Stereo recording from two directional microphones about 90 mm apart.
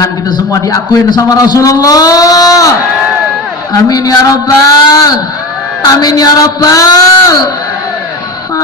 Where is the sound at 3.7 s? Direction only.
45° left (ahead or behind).